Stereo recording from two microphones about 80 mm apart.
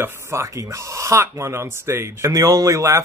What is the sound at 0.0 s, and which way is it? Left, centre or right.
Speech, right.